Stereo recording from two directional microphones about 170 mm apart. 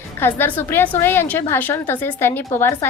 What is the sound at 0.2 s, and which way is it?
A woman's voice, 10° left (ahead or behind).